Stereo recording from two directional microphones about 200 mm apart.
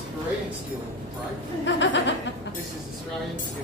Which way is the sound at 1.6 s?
65° left (ahead or behind).